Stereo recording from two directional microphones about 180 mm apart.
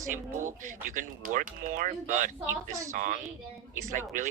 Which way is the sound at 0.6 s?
45° right (ahead or behind).